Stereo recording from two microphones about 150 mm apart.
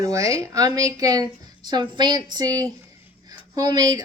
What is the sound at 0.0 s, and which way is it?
Speech, 20° right (ahead or behind).